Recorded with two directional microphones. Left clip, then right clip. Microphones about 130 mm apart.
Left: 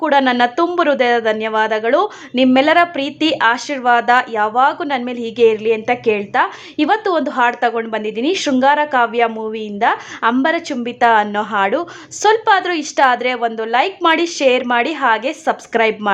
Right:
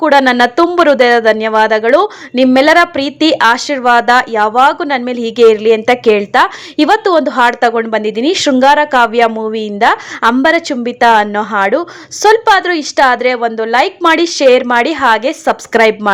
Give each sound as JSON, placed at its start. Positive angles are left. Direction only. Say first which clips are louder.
{"t": 0.0, "sound": "a woman's voice", "louder": "right 5 dB", "side_deg": -30}